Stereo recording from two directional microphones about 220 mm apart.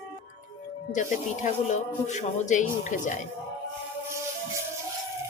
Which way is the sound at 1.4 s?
35° left (ahead or behind).